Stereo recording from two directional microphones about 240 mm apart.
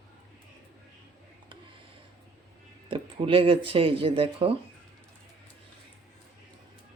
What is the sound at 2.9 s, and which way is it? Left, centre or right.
Speech, right.